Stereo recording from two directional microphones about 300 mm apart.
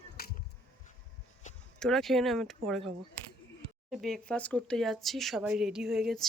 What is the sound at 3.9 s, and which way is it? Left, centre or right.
Speech, centre.